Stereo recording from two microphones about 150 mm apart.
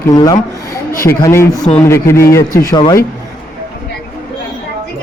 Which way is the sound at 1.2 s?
15° left (ahead or behind).